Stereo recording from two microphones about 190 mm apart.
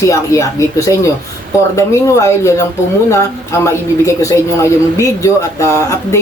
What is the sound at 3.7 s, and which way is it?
Speech, 15° left (ahead or behind).